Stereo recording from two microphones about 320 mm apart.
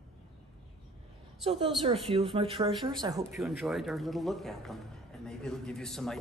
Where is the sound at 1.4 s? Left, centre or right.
Centre.